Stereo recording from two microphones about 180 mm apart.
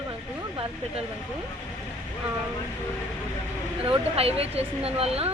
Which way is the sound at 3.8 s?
30° right (ahead or behind).